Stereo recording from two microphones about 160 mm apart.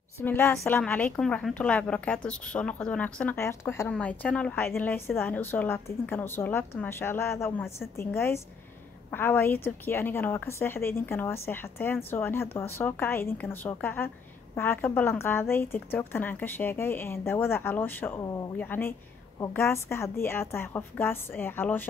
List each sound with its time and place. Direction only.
0.2 s a woman's voice: 15° left (ahead or behind)